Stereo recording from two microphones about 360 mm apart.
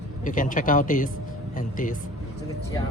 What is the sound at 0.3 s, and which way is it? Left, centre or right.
Speech, left.